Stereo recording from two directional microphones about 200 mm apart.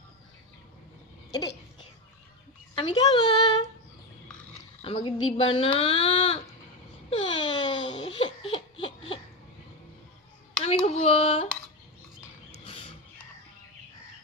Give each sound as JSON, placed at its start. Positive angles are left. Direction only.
{"t": 2.7, "sound": "speech", "side_deg": 25}
{"t": 4.8, "sound": "a woman's voice", "side_deg": 25}
{"t": 7.1, "sound": "a sound", "side_deg": 25}
{"t": 10.6, "sound": "speech", "side_deg": 30}